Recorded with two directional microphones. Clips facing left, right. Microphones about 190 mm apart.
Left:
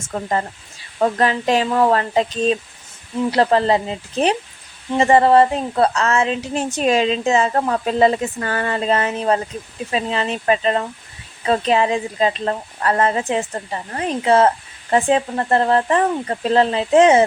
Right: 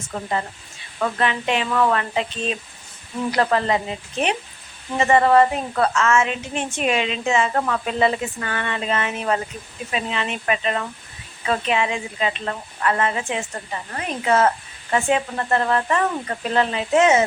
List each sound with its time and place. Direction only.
0.1 s speech: 40° left (ahead or behind)